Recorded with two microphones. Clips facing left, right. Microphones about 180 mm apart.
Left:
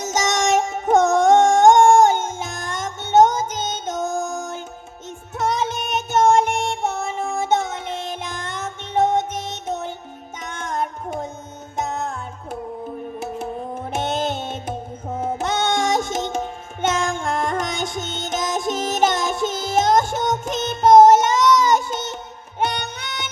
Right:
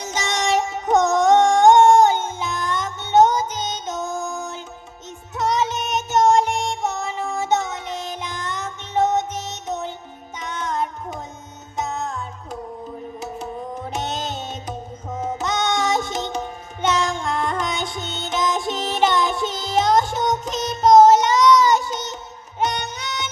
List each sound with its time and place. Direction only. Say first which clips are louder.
0.0 s a sound: left 3 dB; 45° left (ahead or behind)
5.4 s music: right 1 dB; 50° left (ahead or behind)
13.9 s music: left 6 dB; 55° left (ahead or behind)